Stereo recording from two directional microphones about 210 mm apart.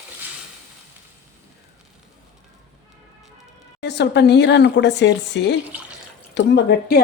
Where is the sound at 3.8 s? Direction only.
55° left (ahead or behind).